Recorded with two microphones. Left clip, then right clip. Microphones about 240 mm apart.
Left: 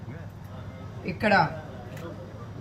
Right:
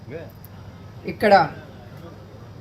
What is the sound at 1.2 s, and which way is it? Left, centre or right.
Speech, right.